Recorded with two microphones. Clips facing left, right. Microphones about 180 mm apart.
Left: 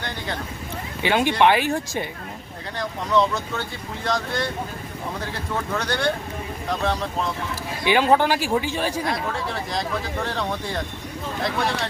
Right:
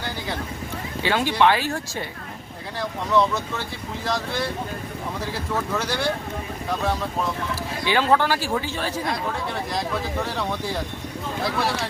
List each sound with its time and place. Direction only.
1.0 s a man's voice: 20° left (ahead or behind)
2.7 s speech: centre (ahead or behind)
5.7 s speech: 5° right (ahead or behind)
7.9 s a man's voice: 15° left (ahead or behind)
9.0 s speech: centre (ahead or behind)